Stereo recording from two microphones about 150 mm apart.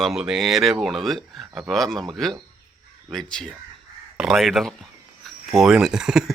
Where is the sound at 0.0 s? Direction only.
5° right (ahead or behind).